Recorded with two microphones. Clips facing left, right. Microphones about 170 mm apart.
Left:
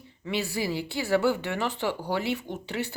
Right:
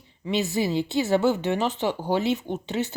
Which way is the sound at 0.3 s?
20° right (ahead or behind).